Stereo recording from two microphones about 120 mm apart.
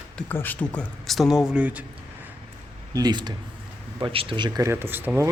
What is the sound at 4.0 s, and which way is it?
Speech, 45° right (ahead or behind).